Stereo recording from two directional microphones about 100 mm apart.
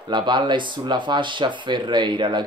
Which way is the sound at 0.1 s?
50° right (ahead or behind).